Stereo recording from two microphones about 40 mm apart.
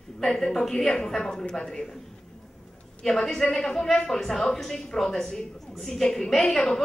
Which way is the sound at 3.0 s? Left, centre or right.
Centre.